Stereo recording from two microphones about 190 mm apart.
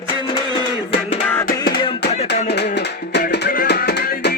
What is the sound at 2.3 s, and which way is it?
Music, 60° left (ahead or behind).